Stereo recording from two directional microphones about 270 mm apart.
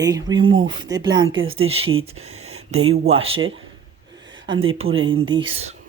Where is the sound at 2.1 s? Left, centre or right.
Right.